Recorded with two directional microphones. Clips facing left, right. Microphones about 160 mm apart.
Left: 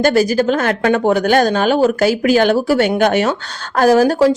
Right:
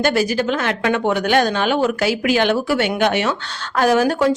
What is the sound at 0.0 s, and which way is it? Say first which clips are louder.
A woman's voice: left 5 dB; 40° left (ahead or behind).